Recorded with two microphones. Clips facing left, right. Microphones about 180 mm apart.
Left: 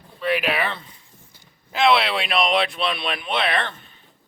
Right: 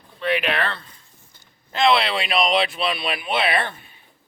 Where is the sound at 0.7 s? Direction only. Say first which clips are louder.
Even; 15° left (ahead or behind).